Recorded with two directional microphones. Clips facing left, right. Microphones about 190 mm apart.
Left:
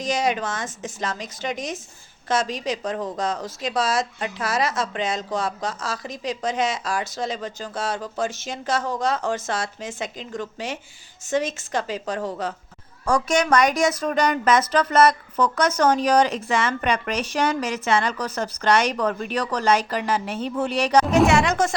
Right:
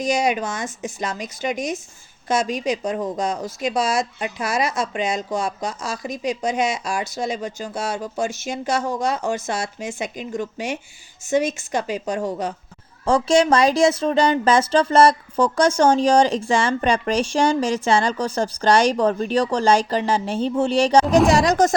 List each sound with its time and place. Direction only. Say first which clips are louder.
0.0 s a woman's voice: right 3 dB; 10° right (ahead or behind)
13.1 s speech: right 4 dB; 25° right (ahead or behind)
21.2 s music: right 3 dB; 35° right (ahead or behind)